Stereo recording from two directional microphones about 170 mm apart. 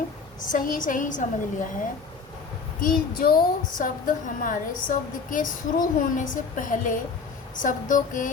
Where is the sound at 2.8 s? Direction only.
55° left (ahead or behind).